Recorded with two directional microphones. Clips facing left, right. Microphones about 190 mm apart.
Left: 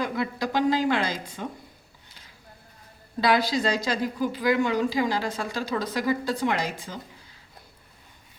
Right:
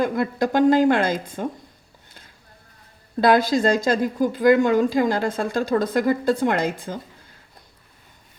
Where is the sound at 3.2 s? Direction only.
50° right (ahead or behind).